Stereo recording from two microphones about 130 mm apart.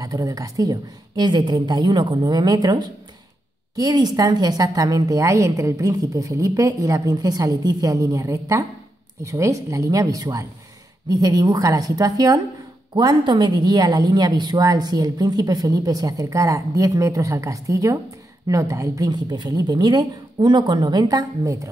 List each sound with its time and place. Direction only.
0.0 s a woman's voice: 25° right (ahead or behind)